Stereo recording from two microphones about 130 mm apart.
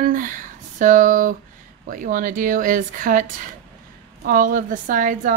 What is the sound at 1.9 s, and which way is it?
Speech, 90° right.